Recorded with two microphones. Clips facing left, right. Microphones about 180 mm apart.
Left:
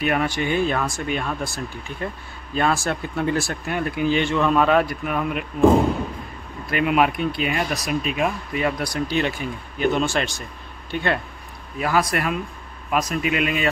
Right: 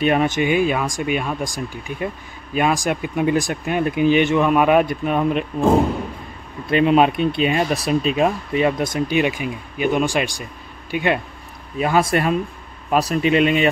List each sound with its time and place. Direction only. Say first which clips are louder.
0.0 s speech: right 5 dB; 20° right (ahead or behind)
6.7 s speech: right 5 dB; 25° right (ahead or behind)
11.8 s speech: right 4 dB; 25° right (ahead or behind)